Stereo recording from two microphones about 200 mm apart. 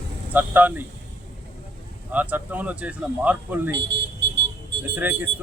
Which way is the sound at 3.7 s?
60° right (ahead or behind).